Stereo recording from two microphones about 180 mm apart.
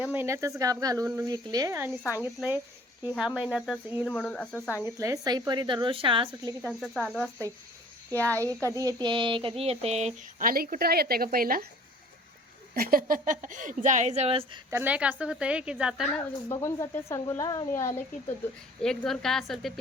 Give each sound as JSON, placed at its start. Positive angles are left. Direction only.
{"t": 0.1, "sound": "a woman's voice", "side_deg": -15}
{"t": 1.9, "sound": "speech", "side_deg": 20}
{"t": 3.2, "sound": "a woman's voice", "side_deg": -5}
{"t": 4.1, "sound": "speech", "side_deg": 5}
{"t": 4.9, "sound": "a woman's voice", "side_deg": -15}
{"t": 6.6, "sound": "a woman's voice", "side_deg": 10}
{"t": 8.1, "sound": "speech", "side_deg": 10}
{"t": 8.7, "sound": "a woman's voice", "side_deg": -20}
{"t": 10.3, "sound": "a woman's voice", "side_deg": -55}
{"t": 12.7, "sound": "speech", "side_deg": -55}
{"t": 14.7, "sound": "a woman's voice", "side_deg": -10}
{"t": 16.5, "sound": "speech", "side_deg": 15}
{"t": 18.8, "sound": "a woman's voice", "side_deg": 5}